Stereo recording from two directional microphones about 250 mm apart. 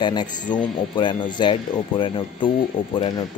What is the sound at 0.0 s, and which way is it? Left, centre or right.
Speech, centre.